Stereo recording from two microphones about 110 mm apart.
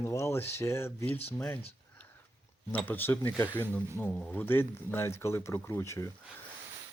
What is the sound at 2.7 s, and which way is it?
Speech, 15° left (ahead or behind).